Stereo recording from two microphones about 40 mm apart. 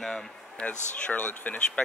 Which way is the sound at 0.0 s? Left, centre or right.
Centre.